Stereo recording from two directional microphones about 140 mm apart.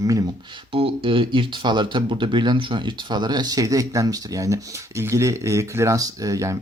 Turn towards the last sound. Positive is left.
turn(degrees=-25)  # may be behind; listen again after turning